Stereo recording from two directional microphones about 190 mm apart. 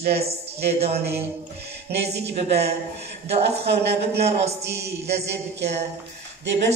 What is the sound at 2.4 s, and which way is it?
A man's voice, 35° right (ahead or behind).